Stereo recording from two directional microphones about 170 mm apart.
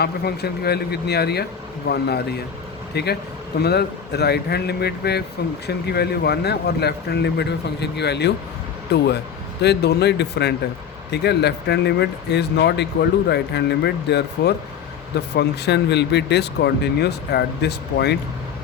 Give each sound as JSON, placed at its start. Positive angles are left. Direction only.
{"t": 0.0, "sound": "speech", "side_deg": 70}